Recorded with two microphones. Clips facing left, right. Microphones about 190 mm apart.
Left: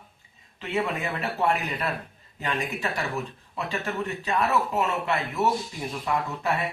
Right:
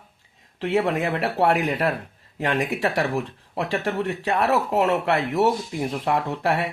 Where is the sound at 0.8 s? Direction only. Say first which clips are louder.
Right 6 dB; 80° right.